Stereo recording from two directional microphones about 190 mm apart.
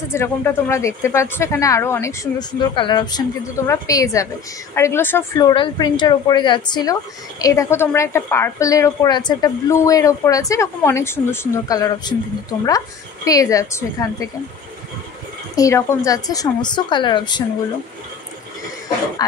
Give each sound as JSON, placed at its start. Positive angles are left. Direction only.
{"t": 0.1, "sound": "speech", "side_deg": 15}
{"t": 5.5, "sound": "speech", "side_deg": 25}
{"t": 15.5, "sound": "speech", "side_deg": 15}